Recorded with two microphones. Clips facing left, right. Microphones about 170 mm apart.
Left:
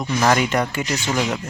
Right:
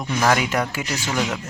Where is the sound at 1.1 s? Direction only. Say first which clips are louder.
Left 1 dB; 5° left (ahead or behind).